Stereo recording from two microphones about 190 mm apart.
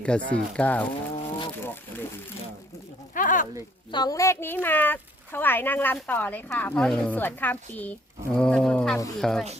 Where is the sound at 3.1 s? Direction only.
45° left (ahead or behind).